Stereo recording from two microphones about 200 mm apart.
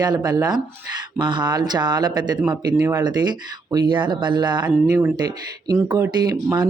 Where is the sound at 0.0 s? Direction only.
20° right (ahead or behind).